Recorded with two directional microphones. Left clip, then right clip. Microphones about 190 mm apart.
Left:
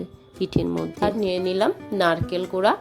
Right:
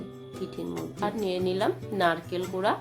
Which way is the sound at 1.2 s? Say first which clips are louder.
Left 3 dB; 30° left (ahead or behind).